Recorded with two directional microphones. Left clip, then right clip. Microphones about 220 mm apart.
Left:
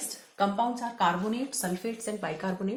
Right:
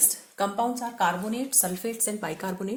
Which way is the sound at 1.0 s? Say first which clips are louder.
Right 1 dB; 35° right (ahead or behind).